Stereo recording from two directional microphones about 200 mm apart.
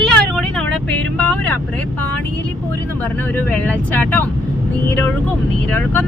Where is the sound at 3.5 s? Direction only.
5° left (ahead or behind).